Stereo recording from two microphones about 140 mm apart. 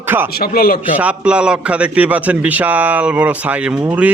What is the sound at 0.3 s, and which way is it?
Speech, 90° left.